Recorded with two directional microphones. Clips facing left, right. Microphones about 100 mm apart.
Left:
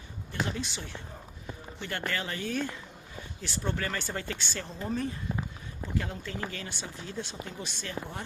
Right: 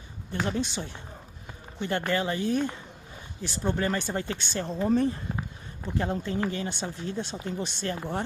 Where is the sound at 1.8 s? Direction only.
25° right (ahead or behind).